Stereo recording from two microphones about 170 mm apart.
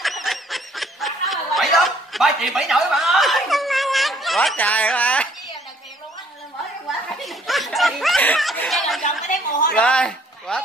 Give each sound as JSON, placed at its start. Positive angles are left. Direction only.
{"t": 0.0, "sound": "snicker", "side_deg": 0}
{"t": 7.2, "sound": "snicker", "side_deg": 0}
{"t": 9.2, "sound": "a sound", "side_deg": 50}
{"t": 9.8, "sound": "a man's voice", "side_deg": 5}